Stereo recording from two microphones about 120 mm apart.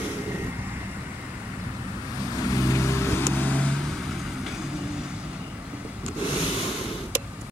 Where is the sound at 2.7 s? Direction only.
20° left (ahead or behind).